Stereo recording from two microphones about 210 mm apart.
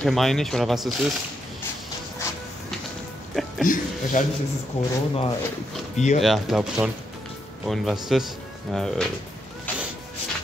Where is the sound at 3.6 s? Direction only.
40° left (ahead or behind).